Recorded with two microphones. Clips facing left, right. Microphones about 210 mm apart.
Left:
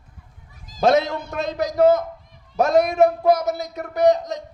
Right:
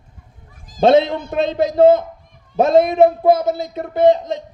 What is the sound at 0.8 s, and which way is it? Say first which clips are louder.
A man's voice: right 5 dB; 25° right (ahead or behind).